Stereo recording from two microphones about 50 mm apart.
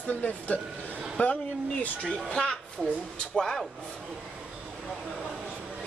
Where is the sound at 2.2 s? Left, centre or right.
Centre.